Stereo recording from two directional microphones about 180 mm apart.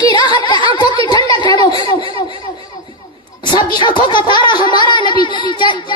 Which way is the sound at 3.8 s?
25° left (ahead or behind).